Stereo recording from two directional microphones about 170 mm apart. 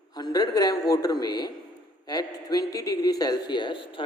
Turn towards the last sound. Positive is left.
turn(degrees=30)  # may be behind; listen again after turning